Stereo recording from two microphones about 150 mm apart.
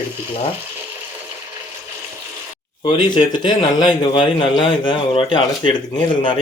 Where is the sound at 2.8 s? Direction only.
30° left (ahead or behind).